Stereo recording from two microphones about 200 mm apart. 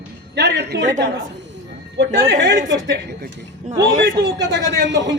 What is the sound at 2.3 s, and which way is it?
Speech, 65° right (ahead or behind).